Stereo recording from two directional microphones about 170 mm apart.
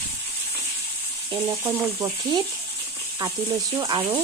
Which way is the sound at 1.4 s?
15° right (ahead or behind).